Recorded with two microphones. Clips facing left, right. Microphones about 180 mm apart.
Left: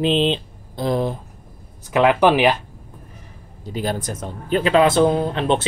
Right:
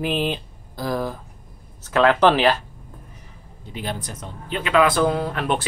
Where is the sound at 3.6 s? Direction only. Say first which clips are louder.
Left 6 dB; 40° left (ahead or behind).